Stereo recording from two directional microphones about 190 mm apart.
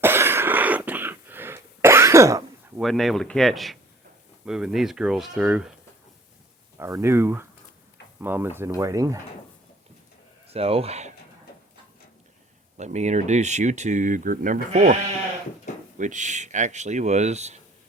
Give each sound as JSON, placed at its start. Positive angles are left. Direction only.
{"t": 0.0, "sound": "throat clearing", "side_deg": -10}
{"t": 2.7, "sound": "speech", "side_deg": 0}
{"t": 6.7, "sound": "speech", "side_deg": -15}
{"t": 10.5, "sound": "speech", "side_deg": -30}
{"t": 12.7, "sound": "speech", "side_deg": -35}
{"t": 16.0, "sound": "speech", "side_deg": -40}